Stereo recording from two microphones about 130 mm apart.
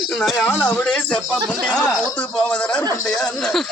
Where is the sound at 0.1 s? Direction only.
Centre (ahead or behind).